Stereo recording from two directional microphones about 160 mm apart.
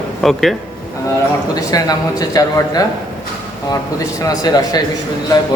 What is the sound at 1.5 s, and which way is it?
A man's voice, 25° left (ahead or behind).